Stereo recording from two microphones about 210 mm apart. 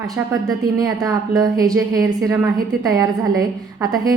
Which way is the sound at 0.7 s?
15° right (ahead or behind).